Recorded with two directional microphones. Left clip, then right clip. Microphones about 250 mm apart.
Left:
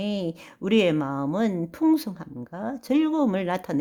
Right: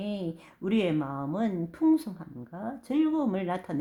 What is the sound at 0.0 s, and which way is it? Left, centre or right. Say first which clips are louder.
A woman's voice: left 6 dB; left.